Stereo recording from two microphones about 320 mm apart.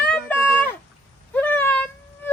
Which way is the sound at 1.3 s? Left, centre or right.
Centre.